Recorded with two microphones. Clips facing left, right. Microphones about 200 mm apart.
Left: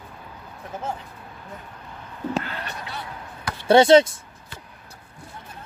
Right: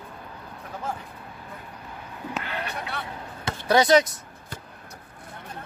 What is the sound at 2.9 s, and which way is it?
Speech, 60° right (ahead or behind).